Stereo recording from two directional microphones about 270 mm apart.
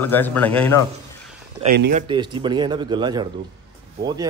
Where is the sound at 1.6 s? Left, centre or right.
Right.